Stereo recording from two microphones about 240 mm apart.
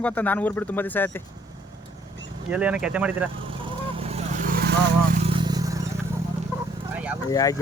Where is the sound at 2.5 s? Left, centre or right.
Centre.